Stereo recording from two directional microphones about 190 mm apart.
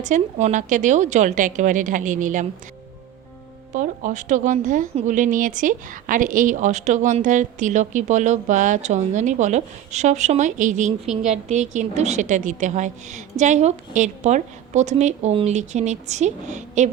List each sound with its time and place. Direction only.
0.0 s speech: 40° right (ahead or behind)
3.8 s speech: 40° right (ahead or behind)